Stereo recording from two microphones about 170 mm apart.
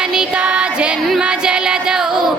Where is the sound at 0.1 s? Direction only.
5° right (ahead or behind).